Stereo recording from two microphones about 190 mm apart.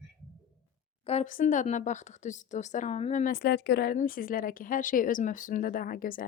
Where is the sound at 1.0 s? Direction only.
35° left (ahead or behind).